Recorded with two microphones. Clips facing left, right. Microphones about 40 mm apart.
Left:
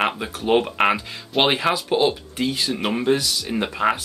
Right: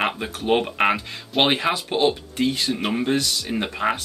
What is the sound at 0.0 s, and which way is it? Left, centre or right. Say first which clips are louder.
Speech: left 1 dB; centre.